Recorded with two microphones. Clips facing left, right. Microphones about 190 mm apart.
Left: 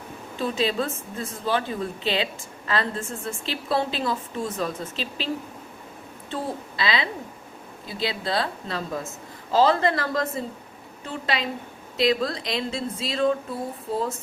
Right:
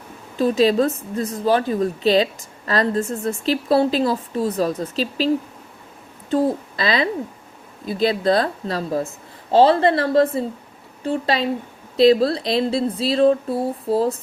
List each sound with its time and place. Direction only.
0.3 s a woman's voice: 40° right (ahead or behind)
6.3 s a woman's voice: 45° right (ahead or behind)